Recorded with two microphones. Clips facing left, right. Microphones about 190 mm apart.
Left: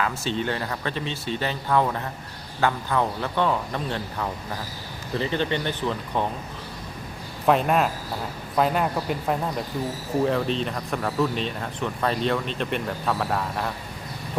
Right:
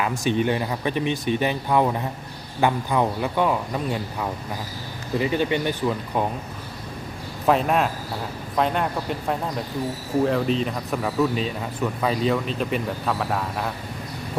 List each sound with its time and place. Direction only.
0.0 s speech: 15° right (ahead or behind)
7.4 s speech: centre (ahead or behind)